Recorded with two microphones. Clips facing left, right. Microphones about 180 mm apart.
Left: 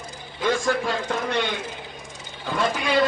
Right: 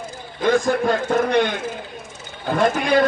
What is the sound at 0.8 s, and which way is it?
A man's voice, 55° right (ahead or behind).